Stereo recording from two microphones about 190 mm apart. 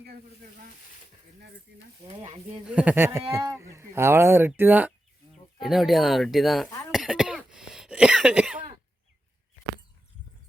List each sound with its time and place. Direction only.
2.0 s speech: 30° right (ahead or behind)
2.6 s speech: 5° right (ahead or behind)
6.9 s cough: 5° right (ahead or behind)